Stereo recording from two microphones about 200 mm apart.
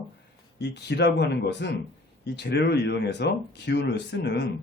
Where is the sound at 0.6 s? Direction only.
55° left (ahead or behind).